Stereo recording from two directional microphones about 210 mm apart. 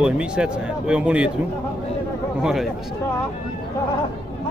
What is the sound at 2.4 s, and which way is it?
Speech, centre (ahead or behind).